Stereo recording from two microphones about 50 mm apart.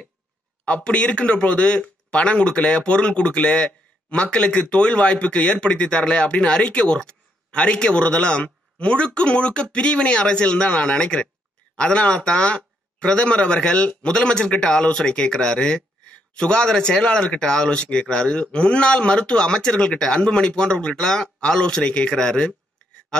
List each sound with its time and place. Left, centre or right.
0.7 s a man's voice: left